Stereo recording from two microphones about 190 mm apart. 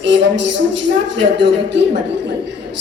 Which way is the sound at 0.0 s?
70° right (ahead or behind).